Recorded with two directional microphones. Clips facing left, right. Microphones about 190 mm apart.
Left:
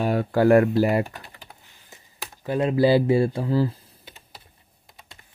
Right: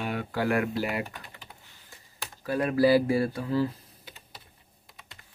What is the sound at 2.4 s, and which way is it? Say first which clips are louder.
Speech: left 3 dB; 25° left (ahead or behind).